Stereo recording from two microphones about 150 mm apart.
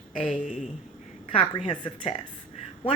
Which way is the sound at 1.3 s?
35° left (ahead or behind).